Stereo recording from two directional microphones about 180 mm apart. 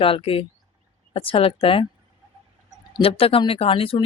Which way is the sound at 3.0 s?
30° left (ahead or behind).